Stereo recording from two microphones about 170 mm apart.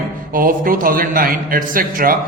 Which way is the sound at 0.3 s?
55° right (ahead or behind).